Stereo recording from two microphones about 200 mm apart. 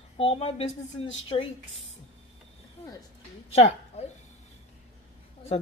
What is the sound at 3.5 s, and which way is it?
Speech, 30° left (ahead or behind).